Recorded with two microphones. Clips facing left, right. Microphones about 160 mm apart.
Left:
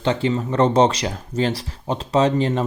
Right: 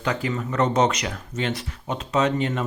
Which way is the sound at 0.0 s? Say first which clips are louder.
Left 5 dB; 30° left (ahead or behind).